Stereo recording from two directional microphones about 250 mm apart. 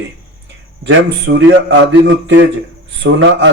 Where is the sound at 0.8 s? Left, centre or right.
Right.